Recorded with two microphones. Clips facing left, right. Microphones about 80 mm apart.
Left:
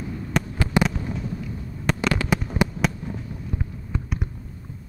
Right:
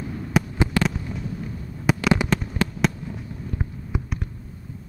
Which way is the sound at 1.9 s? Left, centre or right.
Centre.